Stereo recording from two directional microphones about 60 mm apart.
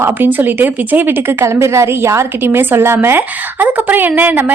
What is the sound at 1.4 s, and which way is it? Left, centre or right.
A woman's voice, right.